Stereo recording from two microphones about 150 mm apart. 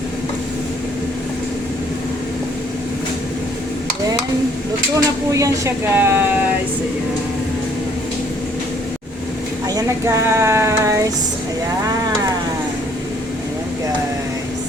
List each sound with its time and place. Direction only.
4.9 s speech: 20° right (ahead or behind)
9.7 s speech: 20° right (ahead or behind)